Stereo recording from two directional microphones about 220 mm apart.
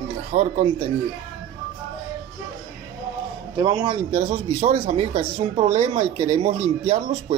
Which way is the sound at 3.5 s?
20° right (ahead or behind).